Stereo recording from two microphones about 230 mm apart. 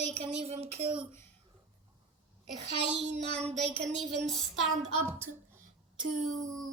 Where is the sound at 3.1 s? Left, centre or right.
Right.